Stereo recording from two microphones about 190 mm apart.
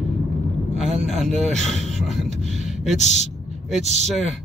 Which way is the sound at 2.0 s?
Centre (ahead or behind).